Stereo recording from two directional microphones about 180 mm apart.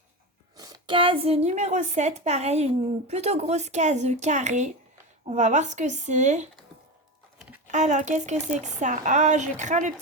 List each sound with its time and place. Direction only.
0.5 s a woman's voice: 20° right (ahead or behind); by 6.5 s 40° right (ahead or behind)
7.7 s speech: 40° right (ahead or behind)